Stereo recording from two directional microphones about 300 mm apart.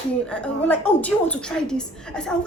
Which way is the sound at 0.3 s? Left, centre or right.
Centre.